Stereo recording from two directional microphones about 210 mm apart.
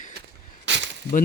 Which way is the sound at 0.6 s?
55° right (ahead or behind).